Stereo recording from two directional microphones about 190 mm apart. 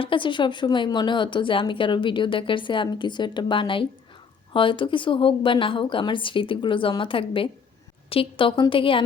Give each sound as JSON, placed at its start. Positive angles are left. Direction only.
{"t": 0.0, "sound": "a woman's voice", "side_deg": 25}